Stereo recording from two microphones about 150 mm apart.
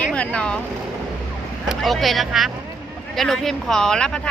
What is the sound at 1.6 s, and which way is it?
Speech, centre (ahead or behind).